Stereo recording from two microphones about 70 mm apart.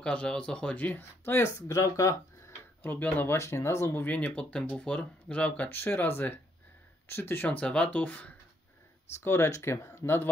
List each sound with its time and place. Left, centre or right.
0.0 s speech: centre; by 1.5 s left
1.7 s speech: left
2.8 s speech: left
3.3 s speech: left
4.0 s speech: left
5.7 s speech: left
7.4 s speech: centre
9.2 s speech: left